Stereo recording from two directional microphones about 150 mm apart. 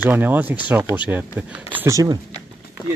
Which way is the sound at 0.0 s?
10° right (ahead or behind).